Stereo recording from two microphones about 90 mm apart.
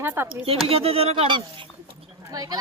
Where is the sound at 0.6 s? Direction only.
90° right; by 1.7 s 65° right (ahead or behind).